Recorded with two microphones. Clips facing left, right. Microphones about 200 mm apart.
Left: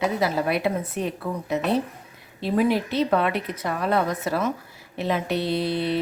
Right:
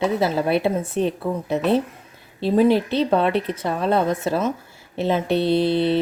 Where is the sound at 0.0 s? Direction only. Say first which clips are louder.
Right 3 dB; 25° right (ahead or behind).